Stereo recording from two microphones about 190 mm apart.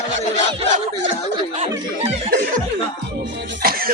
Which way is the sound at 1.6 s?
35° right (ahead or behind).